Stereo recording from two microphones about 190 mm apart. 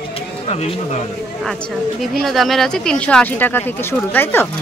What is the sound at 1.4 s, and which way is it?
Speech, 5° left (ahead or behind).